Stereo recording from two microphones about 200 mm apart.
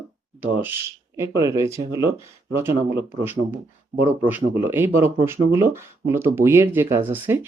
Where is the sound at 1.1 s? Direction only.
15° right (ahead or behind).